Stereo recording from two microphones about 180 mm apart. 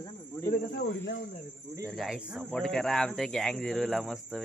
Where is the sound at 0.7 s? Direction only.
65° left (ahead or behind).